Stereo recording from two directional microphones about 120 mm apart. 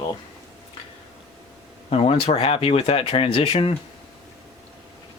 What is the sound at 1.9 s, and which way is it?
Speech, 55° left (ahead or behind).